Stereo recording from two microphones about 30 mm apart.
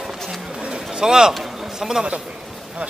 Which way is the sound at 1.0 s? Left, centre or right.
Right.